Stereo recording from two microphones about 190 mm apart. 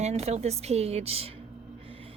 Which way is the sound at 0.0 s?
35° right (ahead or behind).